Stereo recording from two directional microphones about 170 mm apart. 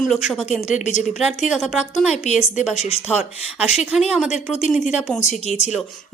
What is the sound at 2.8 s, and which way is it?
Speech, 35° left (ahead or behind).